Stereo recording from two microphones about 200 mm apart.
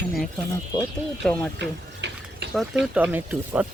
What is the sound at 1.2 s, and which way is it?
Speech, 5° left (ahead or behind).